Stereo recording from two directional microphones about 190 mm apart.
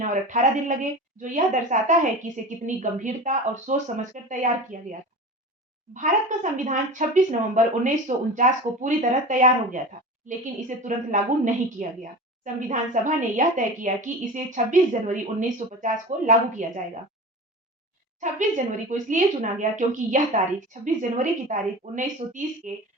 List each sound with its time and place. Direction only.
0.0 s a woman's voice: 40° right (ahead or behind)
11.1 s a woman's voice: 40° right (ahead or behind)
18.2 s a woman's voice: 40° right (ahead or behind)